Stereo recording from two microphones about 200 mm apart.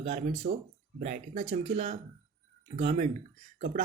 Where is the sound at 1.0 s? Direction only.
40° right (ahead or behind).